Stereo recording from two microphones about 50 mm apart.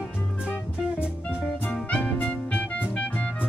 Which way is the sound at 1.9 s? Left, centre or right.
Left.